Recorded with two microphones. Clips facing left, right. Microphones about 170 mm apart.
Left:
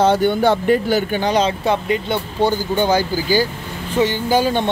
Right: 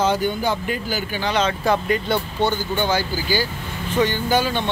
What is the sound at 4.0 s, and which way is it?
Speech, 25° left (ahead or behind).